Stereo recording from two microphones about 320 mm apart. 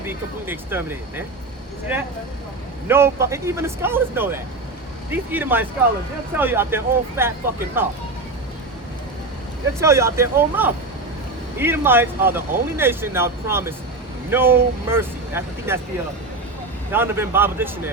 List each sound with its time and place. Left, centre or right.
0.0 s speech: centre
9.8 s speech: centre
16.9 s speech: centre